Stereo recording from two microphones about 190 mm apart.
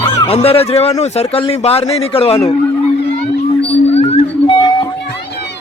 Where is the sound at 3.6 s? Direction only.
30° left (ahead or behind).